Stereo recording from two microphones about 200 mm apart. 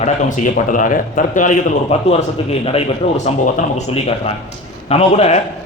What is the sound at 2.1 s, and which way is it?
A man's voice, 30° left (ahead or behind).